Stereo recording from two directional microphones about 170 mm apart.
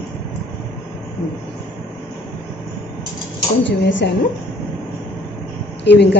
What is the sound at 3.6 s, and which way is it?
Speech, 90° left.